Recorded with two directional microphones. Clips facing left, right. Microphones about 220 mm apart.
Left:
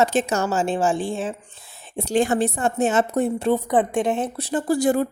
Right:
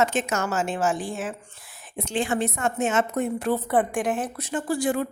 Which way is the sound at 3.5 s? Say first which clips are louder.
Left 3 dB; 15° left (ahead or behind).